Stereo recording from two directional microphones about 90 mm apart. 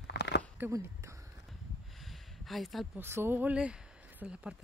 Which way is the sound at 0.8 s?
35° right (ahead or behind).